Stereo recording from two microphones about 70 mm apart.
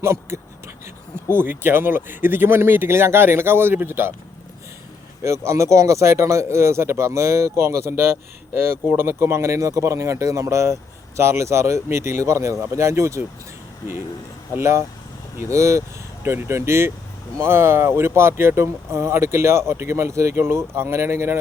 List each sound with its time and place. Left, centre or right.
0.0 s speech: right
5.2 s speech: right
14.5 s speech: right